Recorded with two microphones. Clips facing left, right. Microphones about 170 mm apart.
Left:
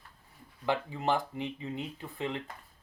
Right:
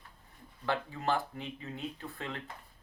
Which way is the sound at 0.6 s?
15° left (ahead or behind).